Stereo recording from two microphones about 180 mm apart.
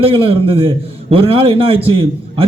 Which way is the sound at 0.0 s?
30° right (ahead or behind).